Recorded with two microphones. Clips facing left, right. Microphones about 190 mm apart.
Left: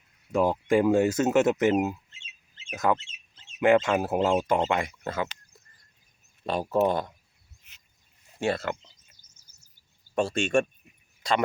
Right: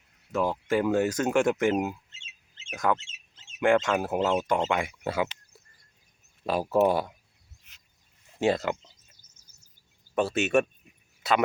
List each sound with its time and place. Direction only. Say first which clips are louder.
0.3 s speech: left 3 dB; 15° left (ahead or behind)
2.7 s speech: left 1 dB; 5° left (ahead or behind)
4.7 s speech: even; 5° right (ahead or behind)
6.4 s speech: right 1 dB; 5° right (ahead or behind)
8.4 s speech: right 3 dB; 15° right (ahead or behind)
10.2 s speech: even; 5° right (ahead or behind)